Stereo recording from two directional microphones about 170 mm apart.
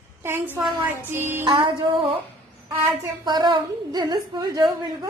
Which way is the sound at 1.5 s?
30° right (ahead or behind).